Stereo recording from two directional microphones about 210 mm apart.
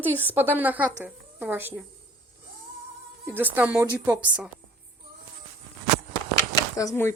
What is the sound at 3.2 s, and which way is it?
A woman's voice, 10° right (ahead or behind).